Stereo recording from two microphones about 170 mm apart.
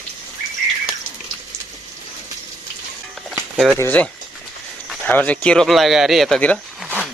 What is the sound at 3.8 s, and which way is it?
Speech, 10° left (ahead or behind).